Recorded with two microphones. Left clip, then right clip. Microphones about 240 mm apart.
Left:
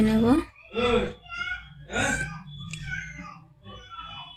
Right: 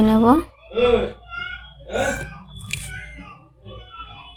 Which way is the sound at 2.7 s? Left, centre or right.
Right.